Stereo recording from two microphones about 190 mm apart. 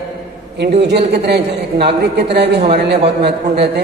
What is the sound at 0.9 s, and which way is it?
A man's voice, 60° right (ahead or behind).